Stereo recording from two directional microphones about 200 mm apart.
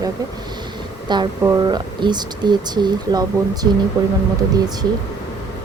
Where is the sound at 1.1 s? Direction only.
20° right (ahead or behind).